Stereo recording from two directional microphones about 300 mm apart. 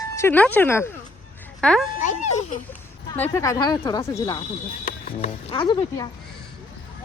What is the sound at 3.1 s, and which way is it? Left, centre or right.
Speech, centre.